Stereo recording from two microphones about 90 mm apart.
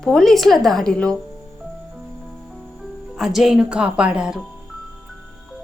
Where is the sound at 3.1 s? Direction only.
5° right (ahead or behind).